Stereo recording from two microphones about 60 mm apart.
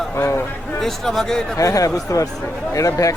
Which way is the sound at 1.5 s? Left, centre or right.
Left.